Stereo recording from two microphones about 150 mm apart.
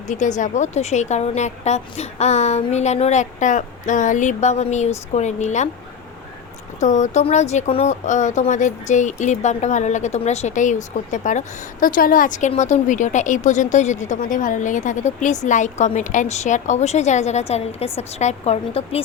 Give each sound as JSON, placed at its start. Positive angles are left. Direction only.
{"t": 0.1, "sound": "a woman's voice", "side_deg": 55}
{"t": 6.7, "sound": "a woman's voice", "side_deg": 55}